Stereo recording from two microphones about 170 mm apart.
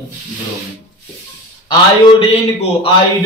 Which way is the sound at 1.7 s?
35° left (ahead or behind).